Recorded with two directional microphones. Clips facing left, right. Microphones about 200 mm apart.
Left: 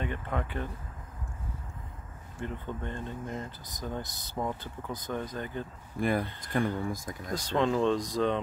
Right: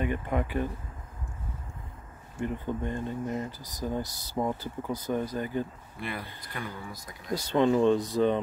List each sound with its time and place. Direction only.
0.0 s speech: 10° right (ahead or behind)
2.4 s speech: 10° right (ahead or behind)
5.9 s speech: 45° left (ahead or behind)
7.3 s speech: 5° right (ahead or behind)